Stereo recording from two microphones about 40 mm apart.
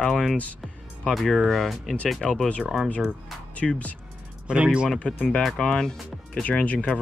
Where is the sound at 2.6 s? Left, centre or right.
Centre.